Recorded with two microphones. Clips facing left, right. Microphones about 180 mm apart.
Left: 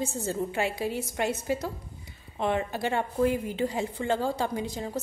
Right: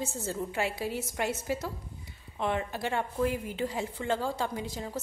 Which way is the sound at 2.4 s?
Centre (ahead or behind).